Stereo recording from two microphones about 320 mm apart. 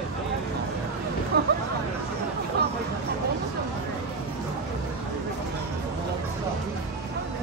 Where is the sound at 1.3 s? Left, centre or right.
Right.